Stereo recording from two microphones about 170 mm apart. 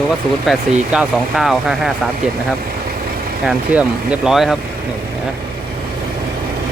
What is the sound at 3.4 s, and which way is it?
Speech, 5° right (ahead or behind).